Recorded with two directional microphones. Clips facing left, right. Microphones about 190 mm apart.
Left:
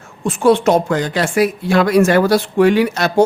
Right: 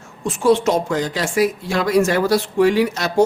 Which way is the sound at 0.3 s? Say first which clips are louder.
Left 3 dB; 60° left (ahead or behind).